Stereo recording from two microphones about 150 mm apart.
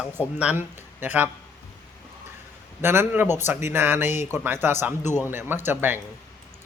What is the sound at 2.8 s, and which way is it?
Speech, 15° right (ahead or behind).